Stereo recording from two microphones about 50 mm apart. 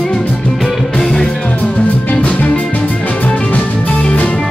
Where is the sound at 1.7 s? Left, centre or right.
Left.